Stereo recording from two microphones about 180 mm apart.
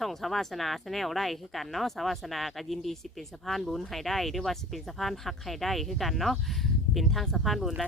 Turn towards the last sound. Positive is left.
turn(degrees=0)  # may be behind; listen again after turning